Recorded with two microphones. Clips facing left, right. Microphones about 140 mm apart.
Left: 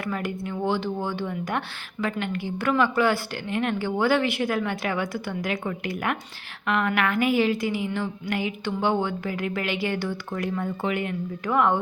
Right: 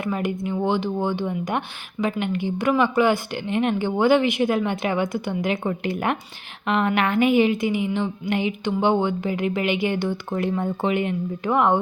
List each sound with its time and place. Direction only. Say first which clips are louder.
0.0 s speech: right 4 dB; 20° right (ahead or behind)